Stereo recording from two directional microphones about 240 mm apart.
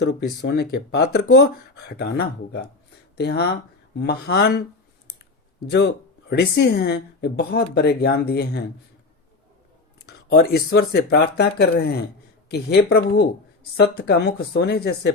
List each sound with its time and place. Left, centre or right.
0.0 s speech: left
5.7 s speech: left
10.1 s speech: left